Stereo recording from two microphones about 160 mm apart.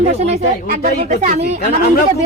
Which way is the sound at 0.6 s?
55° right (ahead or behind).